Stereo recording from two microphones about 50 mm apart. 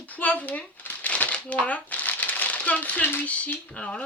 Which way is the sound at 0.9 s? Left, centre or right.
Left.